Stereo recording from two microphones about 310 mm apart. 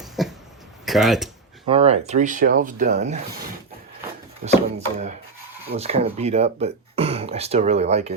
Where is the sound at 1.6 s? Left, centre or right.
Centre.